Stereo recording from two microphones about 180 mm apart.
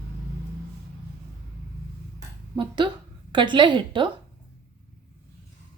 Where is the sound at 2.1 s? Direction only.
25° right (ahead or behind).